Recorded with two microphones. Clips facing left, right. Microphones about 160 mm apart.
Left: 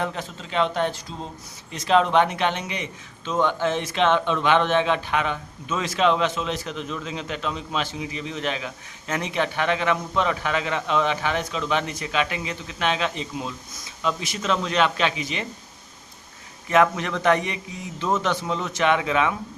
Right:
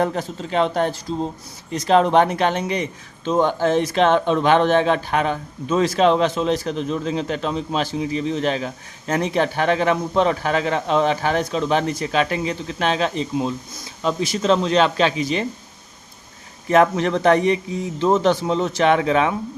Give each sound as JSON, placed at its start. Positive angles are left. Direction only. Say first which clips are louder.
{"t": 0.0, "sound": "a man's voice", "louder": "right 7 dB", "side_deg": -45}
{"t": 16.6, "sound": "a man's voice", "louder": "right 4 dB", "side_deg": -35}